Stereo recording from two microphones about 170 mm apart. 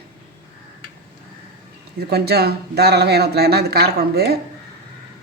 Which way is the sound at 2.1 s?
70° right (ahead or behind).